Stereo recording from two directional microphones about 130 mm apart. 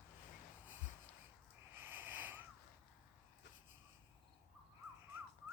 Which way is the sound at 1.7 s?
15° right (ahead or behind).